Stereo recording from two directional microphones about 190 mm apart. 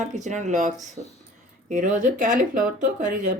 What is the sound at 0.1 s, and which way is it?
Speech, 40° right (ahead or behind).